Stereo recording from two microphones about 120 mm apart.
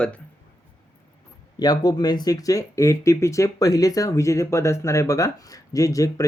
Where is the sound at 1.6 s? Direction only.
35° left (ahead or behind).